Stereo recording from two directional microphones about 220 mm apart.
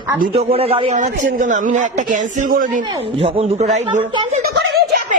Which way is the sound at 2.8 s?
20° right (ahead or behind).